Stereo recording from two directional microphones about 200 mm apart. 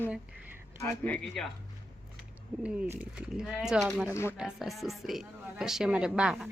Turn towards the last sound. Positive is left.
turn(degrees=-5)  # may be behind; listen again after turning